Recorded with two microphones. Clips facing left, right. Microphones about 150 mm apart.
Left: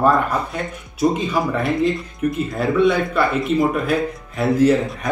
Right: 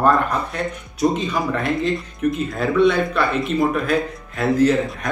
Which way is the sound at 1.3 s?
10° left (ahead or behind).